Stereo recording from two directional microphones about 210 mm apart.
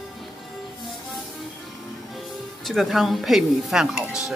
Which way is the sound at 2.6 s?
Centre (ahead or behind).